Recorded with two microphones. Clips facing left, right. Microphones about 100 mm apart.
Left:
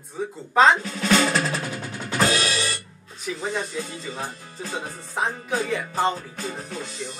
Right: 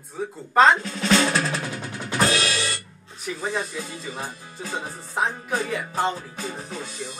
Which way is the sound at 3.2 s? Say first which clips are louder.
Even; 5° right (ahead or behind).